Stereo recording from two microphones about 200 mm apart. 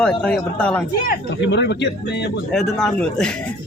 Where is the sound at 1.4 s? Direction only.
60° left (ahead or behind).